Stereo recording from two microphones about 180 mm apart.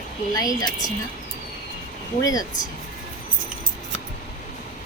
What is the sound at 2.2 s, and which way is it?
Speech, 20° left (ahead or behind).